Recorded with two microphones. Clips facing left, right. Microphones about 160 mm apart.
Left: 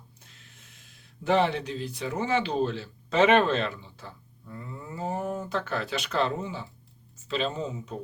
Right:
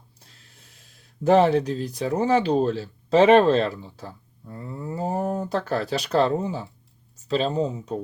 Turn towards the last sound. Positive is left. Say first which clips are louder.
# right 8 dB
turn(degrees=-35)  # may be behind; listen again after turning